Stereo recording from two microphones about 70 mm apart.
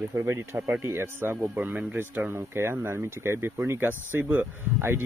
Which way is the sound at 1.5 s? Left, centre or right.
Right.